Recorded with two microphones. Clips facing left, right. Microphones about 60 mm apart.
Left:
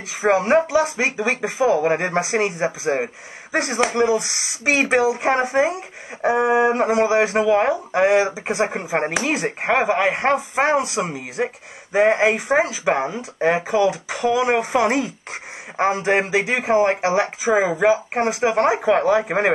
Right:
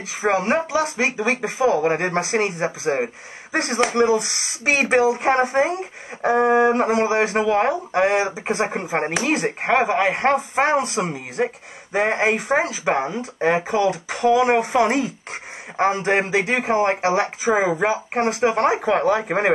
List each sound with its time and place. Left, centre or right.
0.2 s speech: centre
0.7 s speech: left
3.8 s speech: centre
4.2 s speech: left
4.8 s speech: centre